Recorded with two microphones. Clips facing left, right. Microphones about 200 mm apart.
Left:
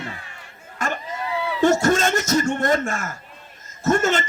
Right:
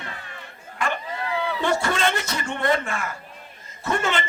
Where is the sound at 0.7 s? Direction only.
45° left (ahead or behind).